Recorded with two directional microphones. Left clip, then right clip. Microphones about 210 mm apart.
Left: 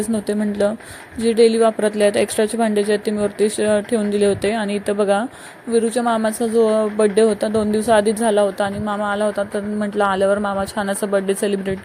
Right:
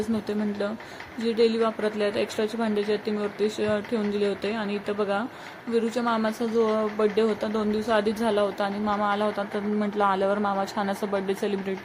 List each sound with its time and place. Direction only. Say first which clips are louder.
1.2 s speech: left 9 dB; 25° left (ahead or behind)